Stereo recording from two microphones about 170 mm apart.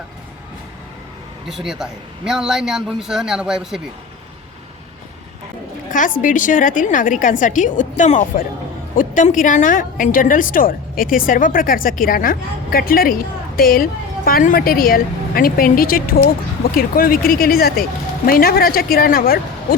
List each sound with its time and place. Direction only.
1.5 s a man's voice: centre (ahead or behind)
6.1 s a woman's voice: 50° left (ahead or behind)